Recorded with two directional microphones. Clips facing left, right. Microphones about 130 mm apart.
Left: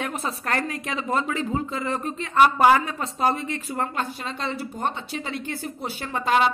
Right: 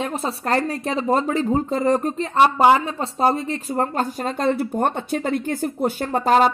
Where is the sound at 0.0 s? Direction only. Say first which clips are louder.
Right 4 dB; 30° right (ahead or behind).